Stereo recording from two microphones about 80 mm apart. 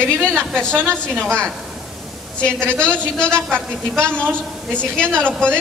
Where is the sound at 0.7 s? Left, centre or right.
Right.